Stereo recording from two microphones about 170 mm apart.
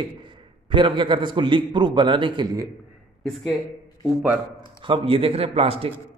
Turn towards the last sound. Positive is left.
turn(degrees=-35)  # may be behind; listen again after turning